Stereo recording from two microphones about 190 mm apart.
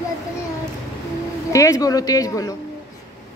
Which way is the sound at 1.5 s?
15° left (ahead or behind).